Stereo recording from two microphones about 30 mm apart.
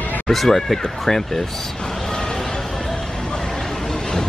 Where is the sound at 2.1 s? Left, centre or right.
Left.